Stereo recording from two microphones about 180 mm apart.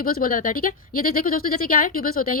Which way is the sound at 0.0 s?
55° left (ahead or behind).